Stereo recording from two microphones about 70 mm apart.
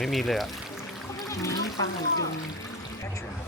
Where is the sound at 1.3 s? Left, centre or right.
Left.